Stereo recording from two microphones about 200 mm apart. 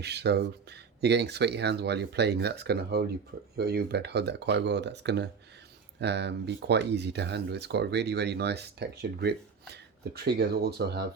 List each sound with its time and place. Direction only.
0.0 s speech: 55° right (ahead or behind)